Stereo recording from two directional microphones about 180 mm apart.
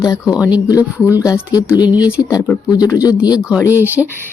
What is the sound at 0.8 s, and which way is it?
Speech, 10° right (ahead or behind).